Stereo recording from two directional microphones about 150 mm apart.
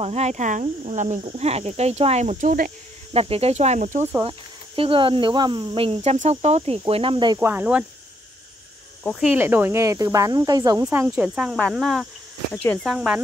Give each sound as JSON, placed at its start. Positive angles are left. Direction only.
{"t": 0.0, "sound": "speech", "side_deg": -45}
{"t": 4.2, "sound": "speech", "side_deg": -35}
{"t": 6.1, "sound": "speech", "side_deg": -50}
{"t": 7.3, "sound": "speech", "side_deg": -10}
{"t": 9.2, "sound": "speech", "side_deg": -10}
{"t": 10.9, "sound": "speech", "side_deg": -10}
{"t": 12.8, "sound": "speech", "side_deg": -5}